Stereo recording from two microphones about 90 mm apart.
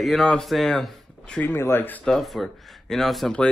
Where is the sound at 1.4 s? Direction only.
25° left (ahead or behind).